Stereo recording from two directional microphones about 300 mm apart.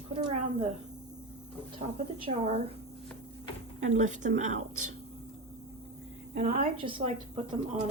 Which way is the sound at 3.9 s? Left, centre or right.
Right.